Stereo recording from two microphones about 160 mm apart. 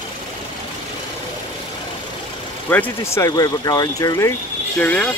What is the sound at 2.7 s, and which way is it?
Speech, 15° left (ahead or behind).